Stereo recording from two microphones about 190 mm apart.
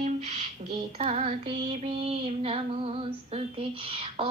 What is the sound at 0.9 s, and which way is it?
Female singing, 35° right (ahead or behind).